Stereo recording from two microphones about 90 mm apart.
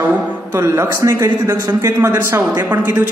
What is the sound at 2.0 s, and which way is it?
A man's voice, 25° right (ahead or behind).